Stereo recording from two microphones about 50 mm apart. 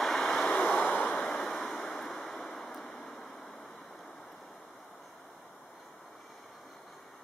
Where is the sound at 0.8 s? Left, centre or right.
Left.